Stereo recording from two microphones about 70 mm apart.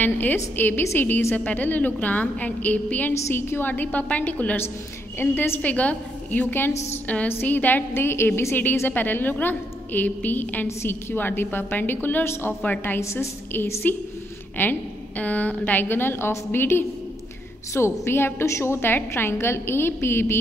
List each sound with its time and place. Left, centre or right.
0.0 s a woman's voice: left
3.2 s a woman's voice: left
8.8 s a woman's voice: left
13.0 s a woman's voice: left
13.5 s a woman's voice: left